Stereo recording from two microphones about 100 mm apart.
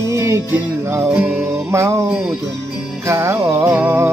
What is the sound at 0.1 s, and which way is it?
Music, 30° right (ahead or behind).